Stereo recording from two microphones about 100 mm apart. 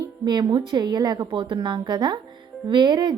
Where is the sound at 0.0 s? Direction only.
45° right (ahead or behind).